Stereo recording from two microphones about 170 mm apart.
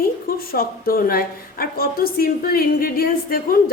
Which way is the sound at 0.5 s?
60° left (ahead or behind).